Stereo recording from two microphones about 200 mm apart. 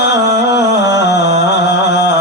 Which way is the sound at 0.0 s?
60° left (ahead or behind).